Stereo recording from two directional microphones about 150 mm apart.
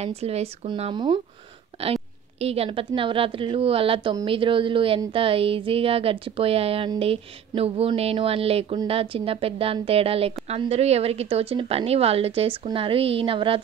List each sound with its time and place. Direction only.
0.0 s a woman's voice: 45° right (ahead or behind)
2.4 s a woman's voice: 40° right (ahead or behind)